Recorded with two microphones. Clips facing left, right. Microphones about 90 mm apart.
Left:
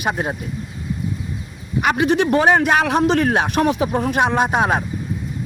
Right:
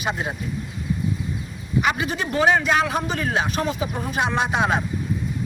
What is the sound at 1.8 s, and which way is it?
A man's voice, 55° left (ahead or behind).